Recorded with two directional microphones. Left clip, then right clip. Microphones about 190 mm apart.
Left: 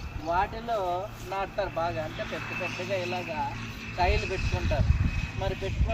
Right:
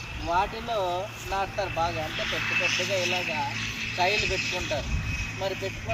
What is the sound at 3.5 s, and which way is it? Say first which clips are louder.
Music: right 8 dB; 45° left (ahead or behind).